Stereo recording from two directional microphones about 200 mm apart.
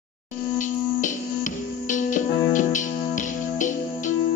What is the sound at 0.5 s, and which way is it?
Music, 40° left (ahead or behind).